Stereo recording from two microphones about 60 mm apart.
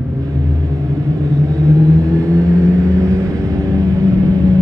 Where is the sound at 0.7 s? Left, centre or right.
Right.